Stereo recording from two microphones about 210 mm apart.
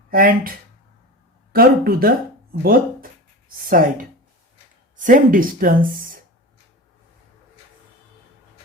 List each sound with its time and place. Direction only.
0.1 s speech: 40° right (ahead or behind)
1.5 s speech: 45° right (ahead or behind)